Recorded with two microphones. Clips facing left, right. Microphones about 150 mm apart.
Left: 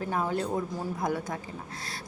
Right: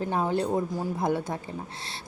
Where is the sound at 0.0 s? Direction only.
25° right (ahead or behind).